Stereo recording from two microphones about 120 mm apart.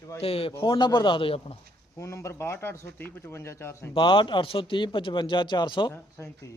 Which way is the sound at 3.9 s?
45° left (ahead or behind).